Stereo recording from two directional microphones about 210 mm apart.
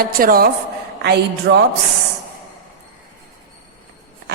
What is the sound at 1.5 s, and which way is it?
Speech, 50° right (ahead or behind).